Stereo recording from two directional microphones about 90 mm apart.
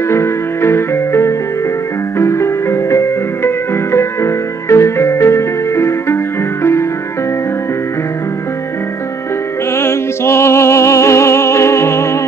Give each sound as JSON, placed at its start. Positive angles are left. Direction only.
{"t": 0.1, "sound": "music", "side_deg": 30}
{"t": 9.8, "sound": "music", "side_deg": 30}